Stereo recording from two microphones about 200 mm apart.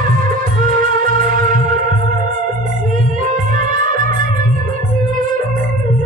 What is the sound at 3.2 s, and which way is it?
Music, 40° right (ahead or behind).